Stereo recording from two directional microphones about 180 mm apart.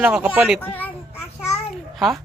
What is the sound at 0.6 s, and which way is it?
Speech, 10° left (ahead or behind).